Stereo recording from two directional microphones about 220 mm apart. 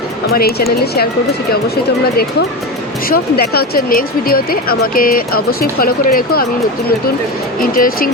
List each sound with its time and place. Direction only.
0.3 s speech: 45° left (ahead or behind)
3.1 s speech: 45° left (ahead or behind)
7.6 s speech: 40° left (ahead or behind)